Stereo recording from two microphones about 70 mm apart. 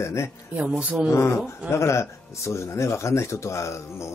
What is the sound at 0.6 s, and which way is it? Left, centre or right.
Speech, centre.